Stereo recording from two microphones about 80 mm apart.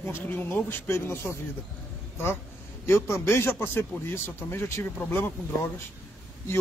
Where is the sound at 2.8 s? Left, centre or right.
Left.